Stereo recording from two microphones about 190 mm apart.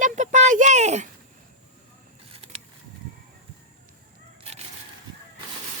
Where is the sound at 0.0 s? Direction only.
40° right (ahead or behind).